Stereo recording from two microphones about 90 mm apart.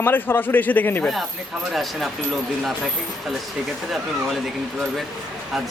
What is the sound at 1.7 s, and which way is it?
Speech, centre (ahead or behind).